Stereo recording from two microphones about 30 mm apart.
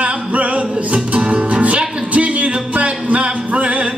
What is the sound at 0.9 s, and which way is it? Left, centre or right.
Music, right.